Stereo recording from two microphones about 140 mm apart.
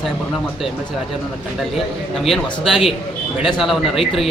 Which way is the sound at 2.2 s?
Centre (ahead or behind).